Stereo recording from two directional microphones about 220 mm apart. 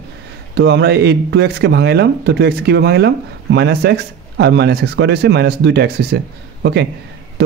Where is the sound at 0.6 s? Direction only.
50° right (ahead or behind).